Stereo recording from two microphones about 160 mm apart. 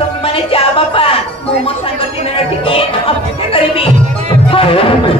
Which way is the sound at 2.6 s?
35° left (ahead or behind).